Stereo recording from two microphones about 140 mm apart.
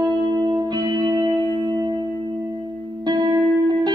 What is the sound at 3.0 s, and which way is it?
Music, 30° right (ahead or behind).